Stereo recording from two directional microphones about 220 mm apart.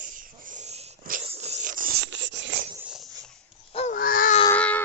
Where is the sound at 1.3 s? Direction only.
30° right (ahead or behind); by 2.6 s 55° right (ahead or behind).